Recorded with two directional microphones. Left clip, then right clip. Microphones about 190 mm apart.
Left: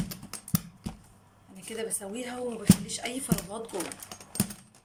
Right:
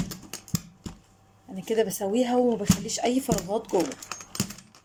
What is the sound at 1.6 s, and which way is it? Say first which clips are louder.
A woman's voice: right 11 dB; 35° right (ahead or behind).